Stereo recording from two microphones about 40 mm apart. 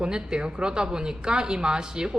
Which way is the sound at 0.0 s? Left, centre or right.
Right.